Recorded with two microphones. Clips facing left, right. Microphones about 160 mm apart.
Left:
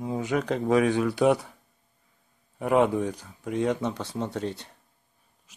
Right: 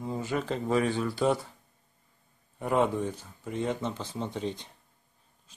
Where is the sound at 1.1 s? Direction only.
75° left (ahead or behind).